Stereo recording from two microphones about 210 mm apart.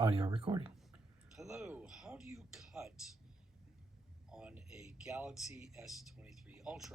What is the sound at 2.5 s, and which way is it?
Music, centre (ahead or behind).